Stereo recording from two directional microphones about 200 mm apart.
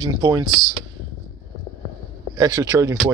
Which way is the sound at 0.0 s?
20° right (ahead or behind).